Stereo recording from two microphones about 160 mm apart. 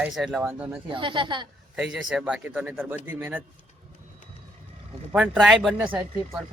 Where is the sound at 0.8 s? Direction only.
30° right (ahead or behind).